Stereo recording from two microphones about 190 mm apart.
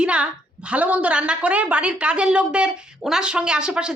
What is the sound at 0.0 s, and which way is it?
A woman's voice, 5° right (ahead or behind).